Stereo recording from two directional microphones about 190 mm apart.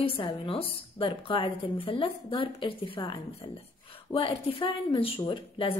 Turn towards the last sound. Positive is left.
turn(degrees=25)  # may be behind; listen again after turning